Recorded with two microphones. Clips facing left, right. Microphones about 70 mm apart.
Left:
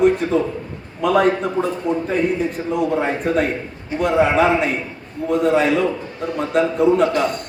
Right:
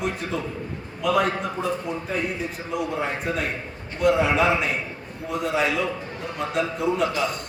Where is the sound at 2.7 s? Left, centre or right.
Left.